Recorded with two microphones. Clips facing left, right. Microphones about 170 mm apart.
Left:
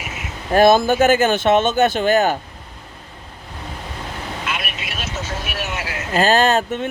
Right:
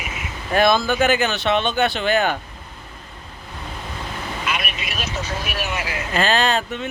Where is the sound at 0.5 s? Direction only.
45° left (ahead or behind).